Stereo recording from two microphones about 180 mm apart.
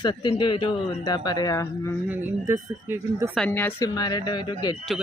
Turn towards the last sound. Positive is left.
turn(degrees=25)  # may be behind; listen again after turning